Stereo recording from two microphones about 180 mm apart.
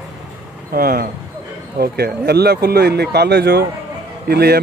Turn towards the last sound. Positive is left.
turn(degrees=-60)  # may be behind; listen again after turning